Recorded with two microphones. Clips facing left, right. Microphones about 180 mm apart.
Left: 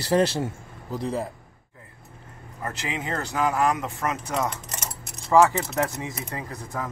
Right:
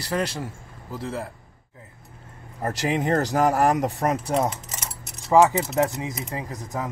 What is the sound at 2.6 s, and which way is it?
Speech, 40° right (ahead or behind).